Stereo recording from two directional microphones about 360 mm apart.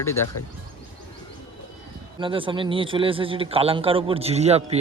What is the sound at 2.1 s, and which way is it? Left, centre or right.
Speech, centre.